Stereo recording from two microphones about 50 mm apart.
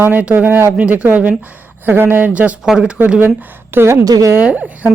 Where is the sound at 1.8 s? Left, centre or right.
Right.